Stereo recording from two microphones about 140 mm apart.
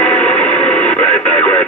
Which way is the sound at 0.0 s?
10° left (ahead or behind).